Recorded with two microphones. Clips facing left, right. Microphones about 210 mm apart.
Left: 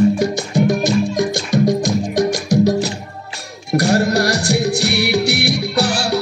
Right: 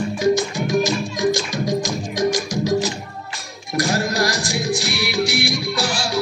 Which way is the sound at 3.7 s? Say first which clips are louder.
Left 6 dB; 65° left (ahead or behind).